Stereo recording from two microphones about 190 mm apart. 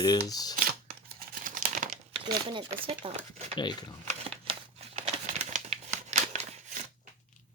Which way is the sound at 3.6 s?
20° left (ahead or behind).